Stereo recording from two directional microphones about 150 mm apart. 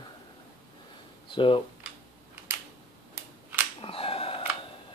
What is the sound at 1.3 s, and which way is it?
Speech, 35° left (ahead or behind).